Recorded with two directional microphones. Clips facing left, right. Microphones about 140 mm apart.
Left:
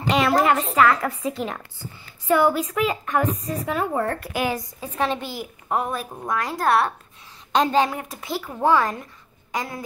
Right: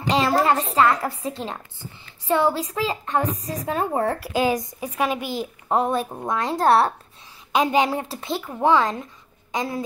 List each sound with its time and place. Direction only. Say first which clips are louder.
0.1 s a sound: even; 30° right (ahead or behind)
0.7 s a woman's voice: even; 30° right (ahead or behind)
4.1 s a woman's voice: right 3 dB; 15° right (ahead or behind); by 6.9 s 30° right (ahead or behind)
7.5 s a woman's voice: even; 15° right (ahead or behind)
7.9 s speech: right 3 dB; 30° right (ahead or behind)